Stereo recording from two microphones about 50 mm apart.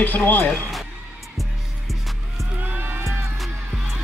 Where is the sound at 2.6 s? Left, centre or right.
Right.